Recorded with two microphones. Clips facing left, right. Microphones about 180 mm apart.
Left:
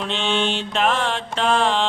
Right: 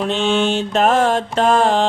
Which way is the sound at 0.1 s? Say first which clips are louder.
Right 4 dB; 45° right (ahead or behind).